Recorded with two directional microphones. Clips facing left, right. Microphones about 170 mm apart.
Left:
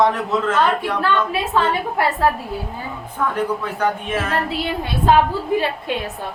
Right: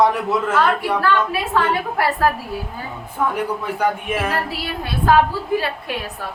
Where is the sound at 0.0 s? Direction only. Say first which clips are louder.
Even; 10° right (ahead or behind).